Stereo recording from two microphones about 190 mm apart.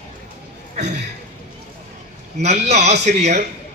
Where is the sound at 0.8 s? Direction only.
35° right (ahead or behind).